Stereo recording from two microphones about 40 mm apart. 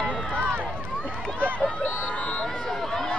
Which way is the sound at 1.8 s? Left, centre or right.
Left.